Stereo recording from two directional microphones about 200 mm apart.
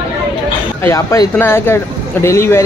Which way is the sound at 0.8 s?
15° left (ahead or behind).